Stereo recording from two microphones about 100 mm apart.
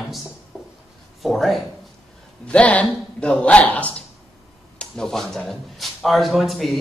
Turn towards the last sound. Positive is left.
turn(degrees=0)  # may be behind; listen again after turning